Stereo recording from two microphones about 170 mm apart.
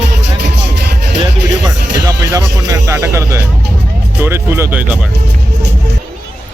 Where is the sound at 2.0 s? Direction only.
20° right (ahead or behind).